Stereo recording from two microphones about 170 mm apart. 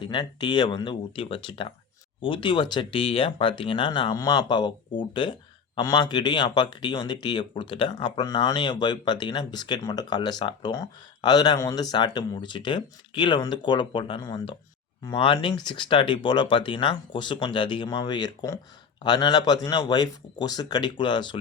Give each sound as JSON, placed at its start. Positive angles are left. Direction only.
{"t": 0.0, "sound": "speech", "side_deg": 25}